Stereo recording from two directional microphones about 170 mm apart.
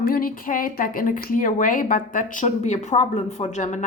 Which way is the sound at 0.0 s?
55° left (ahead or behind).